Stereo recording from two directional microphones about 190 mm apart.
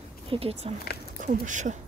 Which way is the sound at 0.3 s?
30° right (ahead or behind).